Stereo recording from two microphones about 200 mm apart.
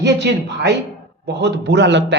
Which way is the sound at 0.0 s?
60° right (ahead or behind).